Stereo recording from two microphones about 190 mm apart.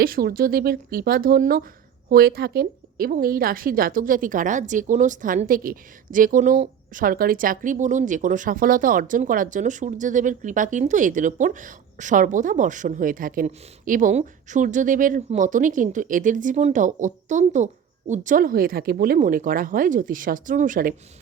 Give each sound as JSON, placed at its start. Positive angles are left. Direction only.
{"t": 0.0, "sound": "a woman's voice", "side_deg": -50}